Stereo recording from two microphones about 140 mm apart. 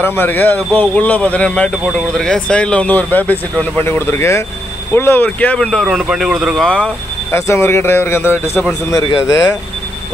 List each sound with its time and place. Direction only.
0.0 s speech: 15° left (ahead or behind); by 6.7 s centre (ahead or behind)
6.7 s speech: 10° left (ahead or behind)
7.3 s speech: 20° left (ahead or behind)